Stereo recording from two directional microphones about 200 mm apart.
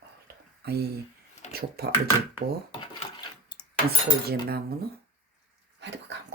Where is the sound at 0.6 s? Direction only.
55° right (ahead or behind).